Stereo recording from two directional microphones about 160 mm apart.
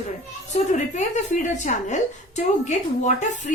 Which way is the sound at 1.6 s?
50° left (ahead or behind).